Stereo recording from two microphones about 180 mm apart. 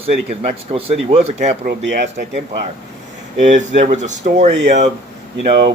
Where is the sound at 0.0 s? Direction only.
35° right (ahead or behind).